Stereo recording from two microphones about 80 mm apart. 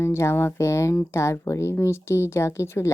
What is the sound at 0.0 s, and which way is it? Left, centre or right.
Speech, left.